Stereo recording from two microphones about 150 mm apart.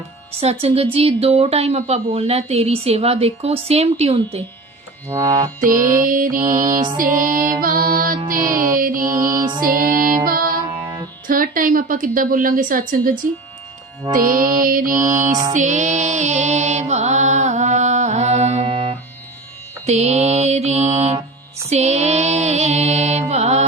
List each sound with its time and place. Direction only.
0.3 s speech: 40° right (ahead or behind)
5.0 s music: 20° right (ahead or behind)
5.6 s a woman's voice: 65° right (ahead or behind)
6.9 s music: 65° right (ahead or behind)
9.0 s music: 25° right (ahead or behind)
9.6 s music: 70° right (ahead or behind)
11.3 s a woman's voice: 65° right (ahead or behind)
14.1 s music: 65° right (ahead or behind)
15.1 s a woman's voice: 55° right (ahead or behind)
15.5 s mantra: 55° right (ahead or behind)
19.8 s speech: 45° right (ahead or behind)
21.7 s music: 45° right (ahead or behind)